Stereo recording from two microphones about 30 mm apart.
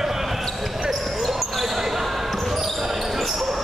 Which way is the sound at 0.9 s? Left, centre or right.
Centre.